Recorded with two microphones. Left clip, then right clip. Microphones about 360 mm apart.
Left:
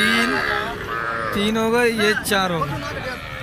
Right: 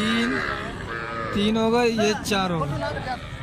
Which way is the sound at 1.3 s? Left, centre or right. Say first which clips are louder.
Left 1 dB; centre.